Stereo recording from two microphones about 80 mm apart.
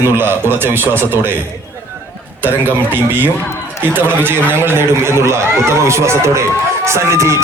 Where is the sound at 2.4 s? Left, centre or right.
Right.